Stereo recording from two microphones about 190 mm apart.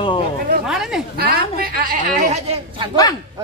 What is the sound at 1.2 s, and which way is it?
A woman's voice, 55° right (ahead or behind).